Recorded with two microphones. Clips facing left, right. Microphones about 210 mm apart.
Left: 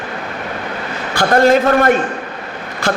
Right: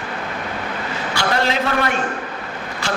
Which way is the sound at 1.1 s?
50° left (ahead or behind).